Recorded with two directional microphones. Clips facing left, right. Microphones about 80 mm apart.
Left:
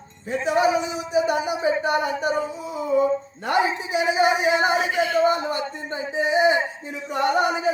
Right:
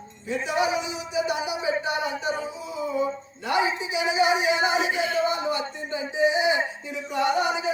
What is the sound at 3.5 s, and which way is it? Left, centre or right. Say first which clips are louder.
Speech: left 3 dB; left.